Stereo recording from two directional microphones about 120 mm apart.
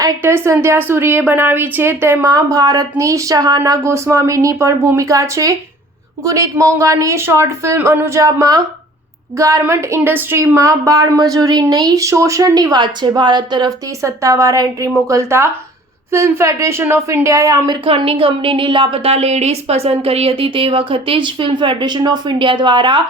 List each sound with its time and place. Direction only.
0.2 s a woman's voice: 20° right (ahead or behind)
2.3 s a woman's voice: 30° right (ahead or behind)
14.0 s a woman's voice: 25° right (ahead or behind)
17.8 s a woman's voice: 50° right (ahead or behind)